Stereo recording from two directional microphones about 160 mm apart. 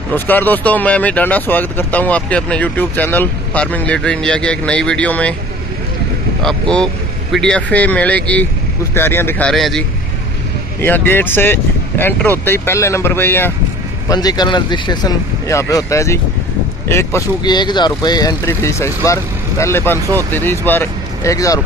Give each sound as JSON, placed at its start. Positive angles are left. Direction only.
{"t": 0.1, "sound": "speech", "side_deg": 10}
{"t": 6.4, "sound": "speech", "side_deg": 5}
{"t": 9.5, "sound": "speech", "side_deg": 0}
{"t": 10.8, "sound": "speech", "side_deg": 10}
{"t": 14.0, "sound": "speech", "side_deg": 25}